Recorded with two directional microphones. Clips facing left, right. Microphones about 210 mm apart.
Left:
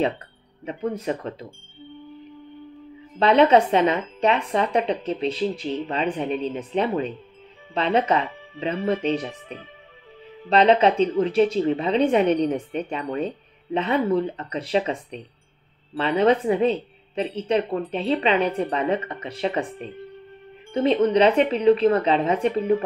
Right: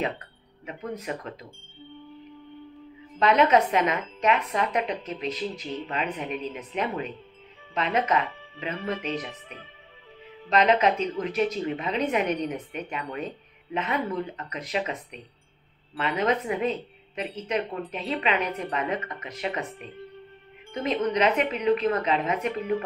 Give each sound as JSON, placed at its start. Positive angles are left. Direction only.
{"t": 0.7, "sound": "a woman's voice", "side_deg": 30}
{"t": 3.2, "sound": "a woman's voice", "side_deg": 30}